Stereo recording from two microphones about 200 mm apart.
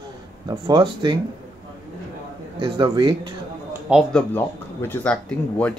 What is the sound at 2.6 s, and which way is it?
Speech, 20° right (ahead or behind).